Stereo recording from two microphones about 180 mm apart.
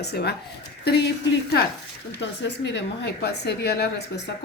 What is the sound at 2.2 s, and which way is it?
A woman's voice, 75° left (ahead or behind).